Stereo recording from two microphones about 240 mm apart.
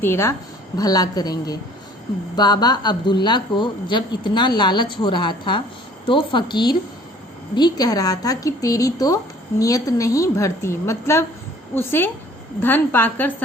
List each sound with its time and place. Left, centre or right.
0.0 s a woman's voice: centre